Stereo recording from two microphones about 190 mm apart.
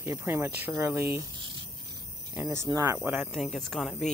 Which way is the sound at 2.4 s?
20° right (ahead or behind).